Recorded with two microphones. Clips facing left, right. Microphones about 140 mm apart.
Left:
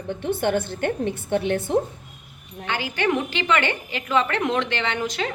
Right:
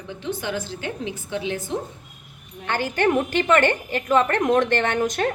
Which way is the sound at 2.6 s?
50° right (ahead or behind).